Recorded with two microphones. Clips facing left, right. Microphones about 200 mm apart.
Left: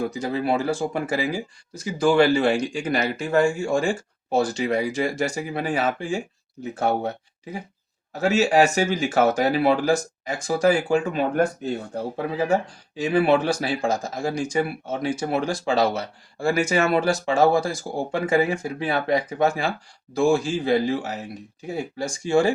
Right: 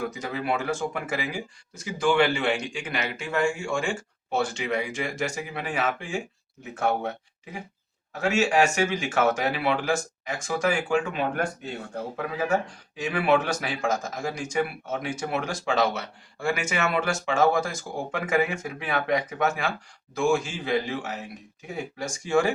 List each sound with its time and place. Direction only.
0.0 s speech: 30° left (ahead or behind)
8.2 s speech: 35° left (ahead or behind)